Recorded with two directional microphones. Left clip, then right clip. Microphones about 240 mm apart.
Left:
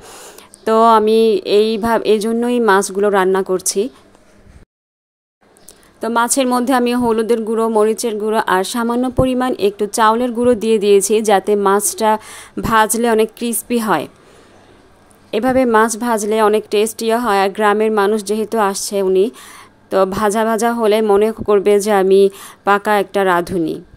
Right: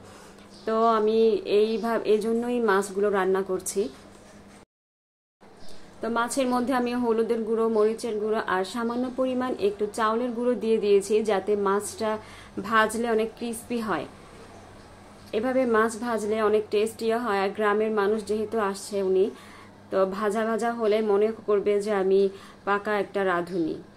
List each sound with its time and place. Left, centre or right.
0.0 s a woman's voice: left
5.9 s a woman's voice: left
15.3 s a woman's voice: left